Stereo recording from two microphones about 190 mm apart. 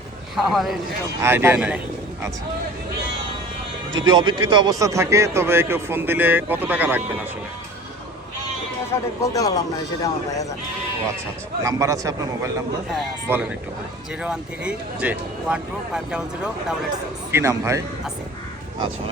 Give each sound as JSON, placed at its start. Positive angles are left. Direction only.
{"t": 0.3, "sound": "speech", "side_deg": 0}
{"t": 1.2, "sound": "a man's voice", "side_deg": -10}
{"t": 4.0, "sound": "a man's voice", "side_deg": -25}
{"t": 8.9, "sound": "speech", "side_deg": 15}
{"t": 11.6, "sound": "a man's voice", "side_deg": -15}
{"t": 17.3, "sound": "a man's voice", "side_deg": -15}